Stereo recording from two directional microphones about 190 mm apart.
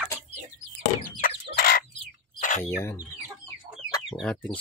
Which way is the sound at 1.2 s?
50° left (ahead or behind).